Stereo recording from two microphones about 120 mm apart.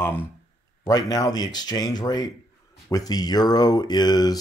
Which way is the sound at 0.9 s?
30° left (ahead or behind).